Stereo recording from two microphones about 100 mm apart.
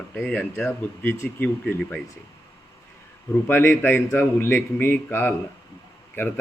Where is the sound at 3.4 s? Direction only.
25° left (ahead or behind).